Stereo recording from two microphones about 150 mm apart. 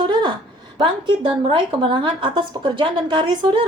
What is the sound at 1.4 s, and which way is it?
A woman's voice, 35° right (ahead or behind).